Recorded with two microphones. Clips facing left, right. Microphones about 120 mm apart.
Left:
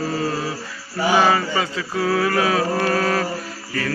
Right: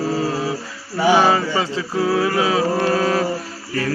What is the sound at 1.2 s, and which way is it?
Mantra, 25° right (ahead or behind).